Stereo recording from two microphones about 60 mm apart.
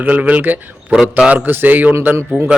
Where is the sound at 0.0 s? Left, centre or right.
Right.